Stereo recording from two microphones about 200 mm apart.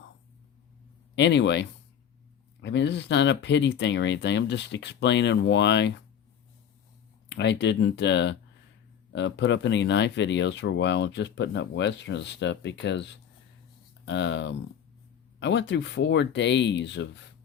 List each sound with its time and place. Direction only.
1.1 s speech: 60° left (ahead or behind)
7.3 s speech: 60° left (ahead or behind)